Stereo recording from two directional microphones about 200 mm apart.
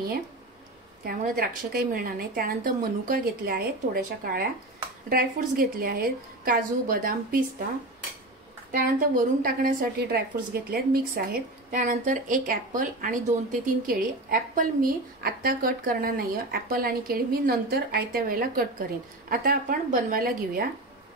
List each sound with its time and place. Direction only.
1.0 s speech: 45° right (ahead or behind)
8.7 s speech: 45° right (ahead or behind)